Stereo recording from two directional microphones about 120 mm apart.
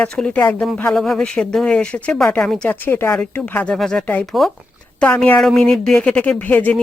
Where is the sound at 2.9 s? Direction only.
20° left (ahead or behind).